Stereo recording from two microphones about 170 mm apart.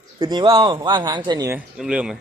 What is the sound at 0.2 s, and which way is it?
Speech, 25° right (ahead or behind).